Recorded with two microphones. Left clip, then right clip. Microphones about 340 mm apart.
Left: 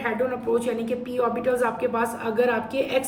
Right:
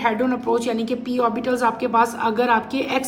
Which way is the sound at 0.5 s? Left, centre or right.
Centre.